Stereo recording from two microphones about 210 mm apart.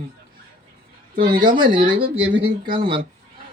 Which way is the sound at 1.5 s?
20° right (ahead or behind).